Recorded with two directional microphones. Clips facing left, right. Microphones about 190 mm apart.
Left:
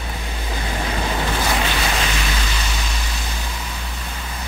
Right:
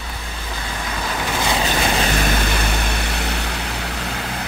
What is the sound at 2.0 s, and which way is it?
Vehicle, 55° right (ahead or behind).